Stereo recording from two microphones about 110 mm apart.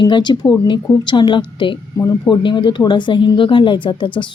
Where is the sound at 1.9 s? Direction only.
30° left (ahead or behind).